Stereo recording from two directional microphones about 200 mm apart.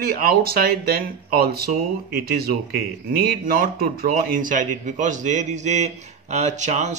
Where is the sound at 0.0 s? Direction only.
50° right (ahead or behind).